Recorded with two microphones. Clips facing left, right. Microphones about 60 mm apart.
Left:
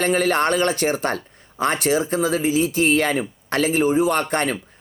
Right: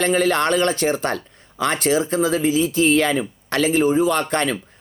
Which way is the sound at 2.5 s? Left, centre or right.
Left.